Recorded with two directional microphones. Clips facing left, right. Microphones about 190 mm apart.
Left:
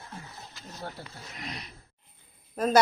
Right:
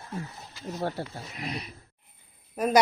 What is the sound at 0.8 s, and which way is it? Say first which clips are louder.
Speech: right 9 dB; 70° right (ahead or behind).